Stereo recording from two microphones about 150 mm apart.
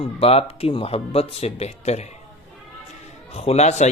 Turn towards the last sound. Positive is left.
turn(degrees=50)  # may be behind; listen again after turning